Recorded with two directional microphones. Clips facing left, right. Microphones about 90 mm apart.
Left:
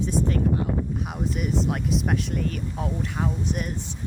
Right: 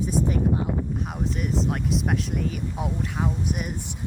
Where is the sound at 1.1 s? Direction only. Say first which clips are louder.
Left 1 dB; centre (ahead or behind).